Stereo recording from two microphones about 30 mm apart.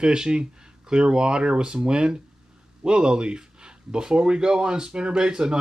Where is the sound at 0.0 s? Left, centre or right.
Right.